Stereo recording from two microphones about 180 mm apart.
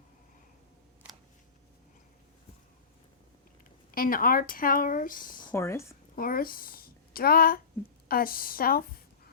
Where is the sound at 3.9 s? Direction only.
50° left (ahead or behind).